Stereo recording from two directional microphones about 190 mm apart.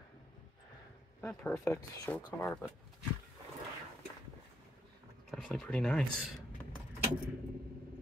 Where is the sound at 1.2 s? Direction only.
10° left (ahead or behind).